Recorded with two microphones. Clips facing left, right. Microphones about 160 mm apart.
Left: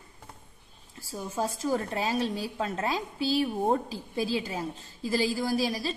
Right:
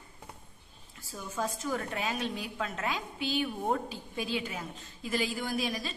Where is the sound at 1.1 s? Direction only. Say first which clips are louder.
Left 4 dB; 35° left (ahead or behind).